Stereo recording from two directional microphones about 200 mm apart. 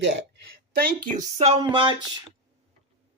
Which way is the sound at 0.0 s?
65° right (ahead or behind).